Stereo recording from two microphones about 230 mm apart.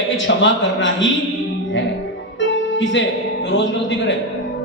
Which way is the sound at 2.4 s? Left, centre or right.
Left.